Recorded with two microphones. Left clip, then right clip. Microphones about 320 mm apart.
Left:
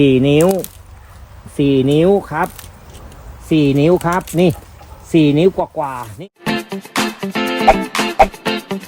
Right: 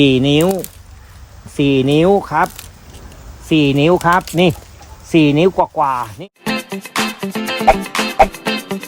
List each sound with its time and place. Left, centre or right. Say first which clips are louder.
0.0 s speech: left 1 dB; centre
1.5 s speech: even; centre
3.5 s speech: even; centre
6.4 s music: even; centre